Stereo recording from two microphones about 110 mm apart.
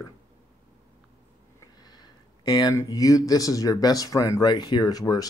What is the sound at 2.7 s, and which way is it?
Speech, 30° left (ahead or behind).